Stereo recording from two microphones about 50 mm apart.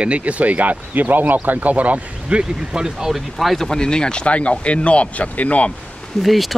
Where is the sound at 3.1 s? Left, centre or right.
Centre; by 5.7 s left.